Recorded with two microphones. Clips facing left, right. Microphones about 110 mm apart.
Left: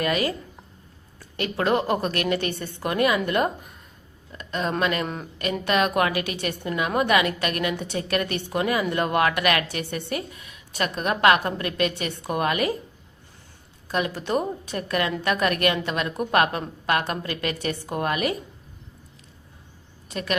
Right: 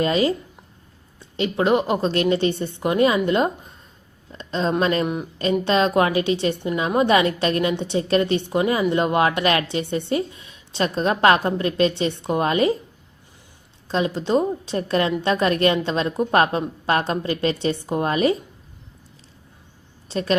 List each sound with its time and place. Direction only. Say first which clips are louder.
0.0 s a woman's voice: right 5 dB; 25° right (ahead or behind)
13.8 s a woman's voice: right 4 dB; 25° right (ahead or behind)
20.1 s a woman's voice: right 6 dB; 30° right (ahead or behind)